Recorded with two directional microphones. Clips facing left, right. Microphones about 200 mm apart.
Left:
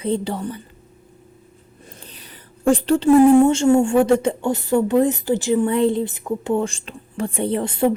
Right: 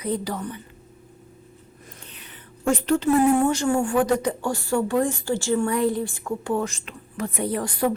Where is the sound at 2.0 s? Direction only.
35° left (ahead or behind).